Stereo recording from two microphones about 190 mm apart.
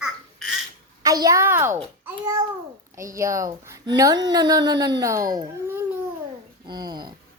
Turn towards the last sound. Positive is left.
turn(degrees=-20)  # may be behind; listen again after turning